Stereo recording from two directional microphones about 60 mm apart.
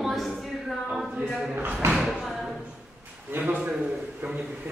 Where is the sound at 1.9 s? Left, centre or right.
Centre.